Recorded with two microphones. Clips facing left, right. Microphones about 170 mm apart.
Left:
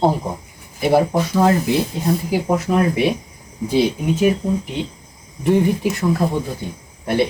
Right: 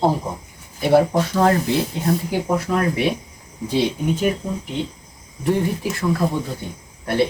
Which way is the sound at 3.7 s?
10° left (ahead or behind).